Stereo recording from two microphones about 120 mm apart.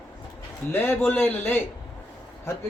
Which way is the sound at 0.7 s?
15° left (ahead or behind).